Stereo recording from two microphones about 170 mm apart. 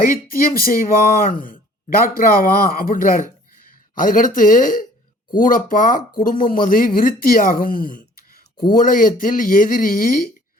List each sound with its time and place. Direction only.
0.0 s speech: 60° left (ahead or behind)